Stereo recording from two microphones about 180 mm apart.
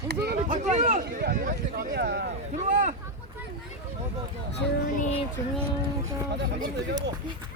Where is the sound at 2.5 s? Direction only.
40° right (ahead or behind).